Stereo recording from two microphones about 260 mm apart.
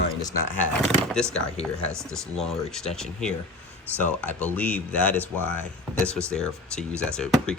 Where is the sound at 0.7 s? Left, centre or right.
Centre.